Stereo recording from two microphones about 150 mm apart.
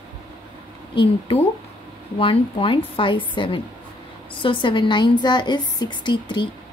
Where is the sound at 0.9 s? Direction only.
35° left (ahead or behind).